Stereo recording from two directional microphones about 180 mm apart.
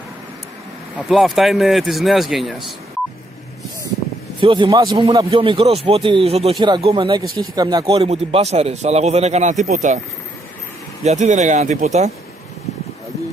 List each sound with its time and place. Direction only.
0.9 s speech: centre (ahead or behind)
4.4 s speech: 30° right (ahead or behind)
11.1 s speech: 40° right (ahead or behind)